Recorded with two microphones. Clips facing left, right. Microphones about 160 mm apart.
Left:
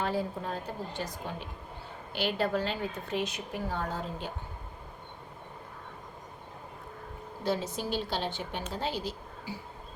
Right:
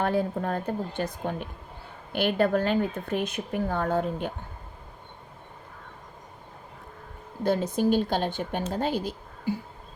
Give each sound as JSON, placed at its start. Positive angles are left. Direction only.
{"t": 0.0, "sound": "a woman's voice", "side_deg": -55}
{"t": 7.4, "sound": "speech", "side_deg": -50}